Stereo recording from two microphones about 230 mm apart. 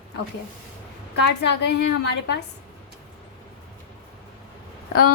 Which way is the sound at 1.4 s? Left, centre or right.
Left.